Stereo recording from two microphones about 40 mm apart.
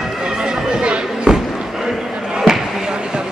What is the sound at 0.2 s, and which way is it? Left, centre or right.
Chatter, right.